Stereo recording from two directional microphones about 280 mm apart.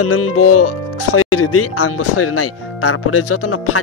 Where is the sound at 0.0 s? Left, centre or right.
Left.